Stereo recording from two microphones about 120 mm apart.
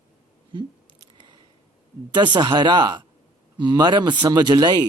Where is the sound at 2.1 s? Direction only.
40° right (ahead or behind).